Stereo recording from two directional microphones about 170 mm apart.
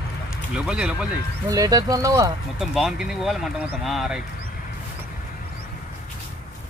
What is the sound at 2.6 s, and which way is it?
Speech, centre (ahead or behind).